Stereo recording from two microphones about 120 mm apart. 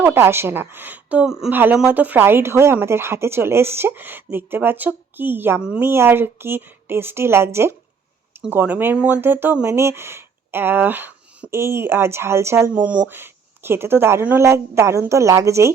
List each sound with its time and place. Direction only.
0.0 s speech: 20° right (ahead or behind)
1.5 s speech: 15° right (ahead or behind)